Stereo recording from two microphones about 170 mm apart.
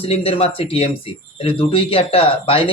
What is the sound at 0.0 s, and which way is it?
Speech, 35° left (ahead or behind).